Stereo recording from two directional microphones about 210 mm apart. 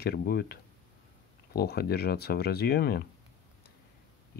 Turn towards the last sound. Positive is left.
turn(degrees=50)  # may be behind; listen again after turning